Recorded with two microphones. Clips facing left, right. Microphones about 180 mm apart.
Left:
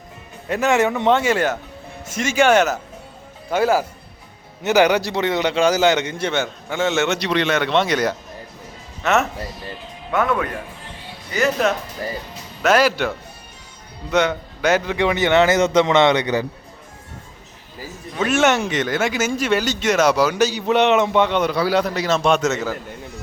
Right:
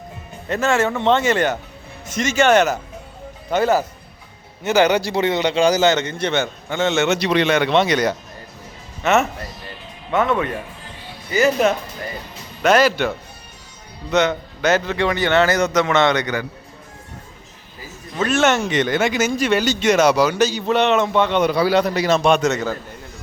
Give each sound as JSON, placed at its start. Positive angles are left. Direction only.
{"t": 0.4, "sound": "a man's voice", "side_deg": 10}
{"t": 5.0, "sound": "speech", "side_deg": 0}
{"t": 7.2, "sound": "speech", "side_deg": -10}
{"t": 11.3, "sound": "speech", "side_deg": 0}
{"t": 14.1, "sound": "a man's voice", "side_deg": 10}
{"t": 18.3, "sound": "a man's voice", "side_deg": 15}
{"t": 18.7, "sound": "speech", "side_deg": 5}
{"t": 21.4, "sound": "speech", "side_deg": 0}
{"t": 22.1, "sound": "a man's voice", "side_deg": -10}
{"t": 22.4, "sound": "speech", "side_deg": 5}